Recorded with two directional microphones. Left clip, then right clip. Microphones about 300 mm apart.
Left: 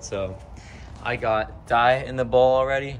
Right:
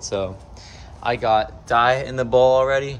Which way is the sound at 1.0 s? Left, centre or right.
Centre.